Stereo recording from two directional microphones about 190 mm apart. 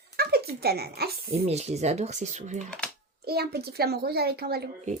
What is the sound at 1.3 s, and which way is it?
Speech, 35° right (ahead or behind).